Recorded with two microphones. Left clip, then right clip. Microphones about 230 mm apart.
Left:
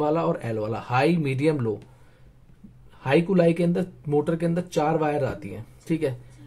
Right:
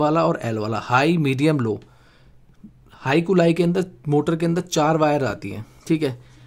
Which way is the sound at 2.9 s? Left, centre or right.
Right.